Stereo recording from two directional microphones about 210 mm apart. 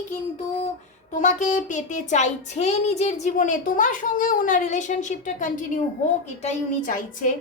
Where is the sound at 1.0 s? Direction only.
35° left (ahead or behind).